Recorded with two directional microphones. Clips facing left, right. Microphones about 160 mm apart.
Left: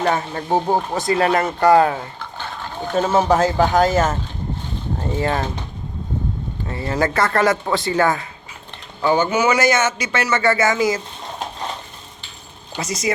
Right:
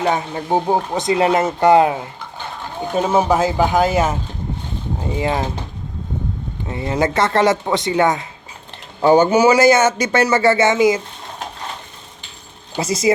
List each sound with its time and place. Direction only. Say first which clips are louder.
0.0 s speech: right 1 dB; 15° right (ahead or behind)
6.7 s speech: right 2 dB; 20° right (ahead or behind)
9.0 s speech: right 6 dB; 40° right (ahead or behind); by 11.0 s 20° right (ahead or behind)
12.7 s speech: right 5 dB; 30° right (ahead or behind)